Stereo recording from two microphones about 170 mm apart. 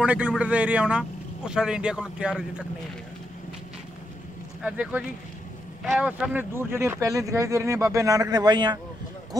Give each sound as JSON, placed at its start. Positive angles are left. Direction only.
{"t": 0.0, "sound": "speech", "side_deg": -10}
{"t": 4.6, "sound": "speech", "side_deg": -5}